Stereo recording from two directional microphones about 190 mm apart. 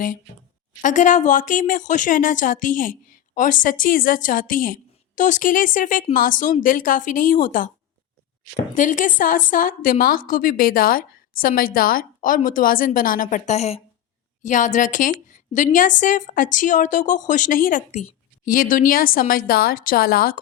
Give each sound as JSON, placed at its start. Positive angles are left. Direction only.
{"t": 0.8, "sound": "speech", "side_deg": 40}
{"t": 8.7, "sound": "a woman's voice", "side_deg": 45}